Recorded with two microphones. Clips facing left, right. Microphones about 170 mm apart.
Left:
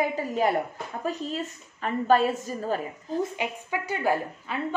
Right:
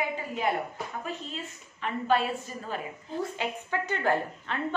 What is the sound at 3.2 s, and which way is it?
A woman's voice, 15° left (ahead or behind).